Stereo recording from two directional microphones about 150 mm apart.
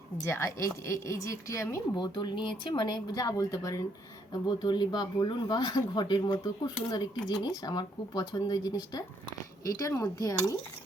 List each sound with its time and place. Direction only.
0.3 s speech: 20° left (ahead or behind)